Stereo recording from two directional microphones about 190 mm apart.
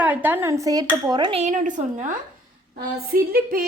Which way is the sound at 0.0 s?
10° right (ahead or behind).